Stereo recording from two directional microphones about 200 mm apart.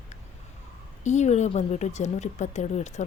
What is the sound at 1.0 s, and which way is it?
Speech, 35° left (ahead or behind).